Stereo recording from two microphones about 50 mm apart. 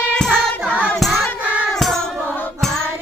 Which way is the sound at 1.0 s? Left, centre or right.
Centre.